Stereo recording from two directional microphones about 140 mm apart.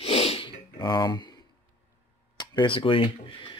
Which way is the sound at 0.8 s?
30° left (ahead or behind).